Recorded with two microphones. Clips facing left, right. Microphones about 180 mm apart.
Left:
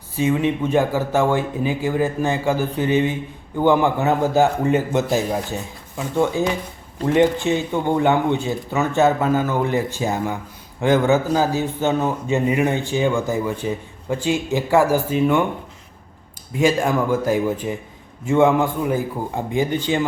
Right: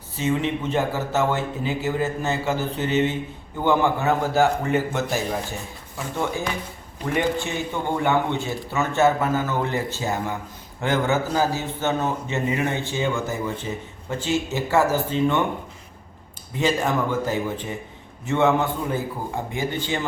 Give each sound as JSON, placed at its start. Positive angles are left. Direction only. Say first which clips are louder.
{"t": 0.2, "sound": "speech", "louder": "left 4 dB", "side_deg": 15}
{"t": 16.6, "sound": "speech", "louder": "left 4 dB", "side_deg": 10}